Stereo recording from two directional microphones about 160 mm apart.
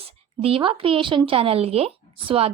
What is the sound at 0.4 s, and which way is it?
A woman's voice, 35° right (ahead or behind).